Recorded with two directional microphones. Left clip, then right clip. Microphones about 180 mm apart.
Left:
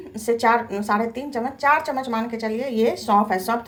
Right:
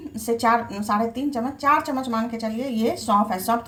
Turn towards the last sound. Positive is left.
turn(degrees=10)  # may be behind; listen again after turning